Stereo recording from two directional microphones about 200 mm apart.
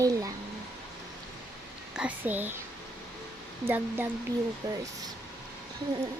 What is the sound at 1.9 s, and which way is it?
Speech, 5° right (ahead or behind).